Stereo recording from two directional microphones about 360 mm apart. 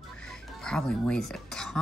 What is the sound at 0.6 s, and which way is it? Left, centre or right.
Speech, centre.